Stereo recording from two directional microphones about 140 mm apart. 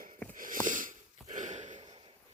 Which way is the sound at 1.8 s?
35° right (ahead or behind).